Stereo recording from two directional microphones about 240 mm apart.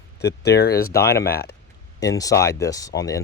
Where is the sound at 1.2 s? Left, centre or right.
Left.